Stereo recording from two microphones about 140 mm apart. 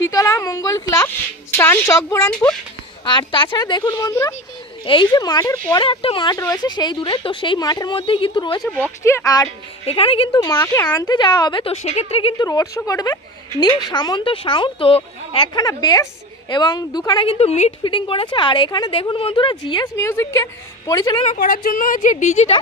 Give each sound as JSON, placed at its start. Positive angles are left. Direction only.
{"t": 0.0, "sound": "a woman's voice", "side_deg": 25}
{"t": 3.1, "sound": "speech", "side_deg": 35}
{"t": 4.8, "sound": "a woman's voice", "side_deg": 35}
{"t": 5.9, "sound": "speech", "side_deg": 40}
{"t": 6.3, "sound": "speech", "side_deg": 25}
{"t": 8.7, "sound": "a woman's voice", "side_deg": 15}
{"t": 9.8, "sound": "speech", "side_deg": 45}
{"t": 11.7, "sound": "a woman's voice", "side_deg": 50}
{"t": 12.4, "sound": "speech", "side_deg": 25}
{"t": 20.1, "sound": "a woman's voice", "side_deg": 20}
{"t": 21.3, "sound": "a woman's voice", "side_deg": 80}